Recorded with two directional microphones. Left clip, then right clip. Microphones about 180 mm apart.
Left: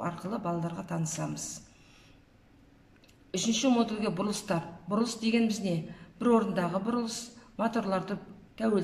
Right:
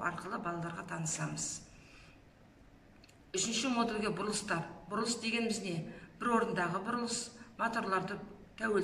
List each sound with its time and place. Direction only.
0.0 s a woman's voice: 35° left (ahead or behind)
3.3 s a woman's voice: 35° left (ahead or behind)